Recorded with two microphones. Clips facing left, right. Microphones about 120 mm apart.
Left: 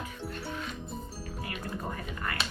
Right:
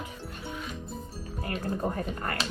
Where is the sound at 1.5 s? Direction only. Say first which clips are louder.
Right 7 dB; 40° right (ahead or behind).